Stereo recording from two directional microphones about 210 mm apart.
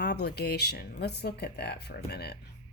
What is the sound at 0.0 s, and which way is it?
Speech, 50° left (ahead or behind).